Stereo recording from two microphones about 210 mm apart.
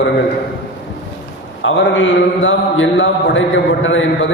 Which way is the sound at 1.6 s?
65° left (ahead or behind).